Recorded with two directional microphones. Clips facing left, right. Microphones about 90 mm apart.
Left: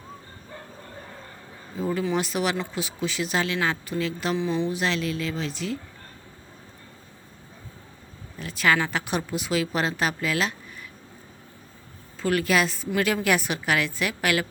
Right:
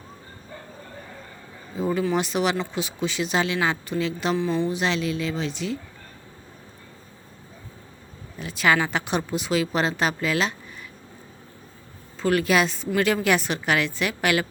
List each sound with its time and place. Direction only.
1.8 s speech: 5° right (ahead or behind)
4.4 s speech: 15° left (ahead or behind)
4.7 s speech: centre (ahead or behind)
8.4 s speech: centre (ahead or behind)
12.2 s speech: centre (ahead or behind)